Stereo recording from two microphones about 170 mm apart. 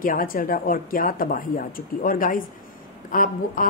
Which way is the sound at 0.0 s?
55° left (ahead or behind).